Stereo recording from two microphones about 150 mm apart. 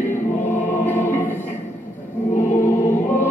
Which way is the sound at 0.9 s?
15° left (ahead or behind).